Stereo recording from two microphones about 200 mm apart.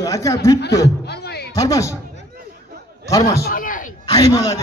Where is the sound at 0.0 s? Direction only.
15° left (ahead or behind).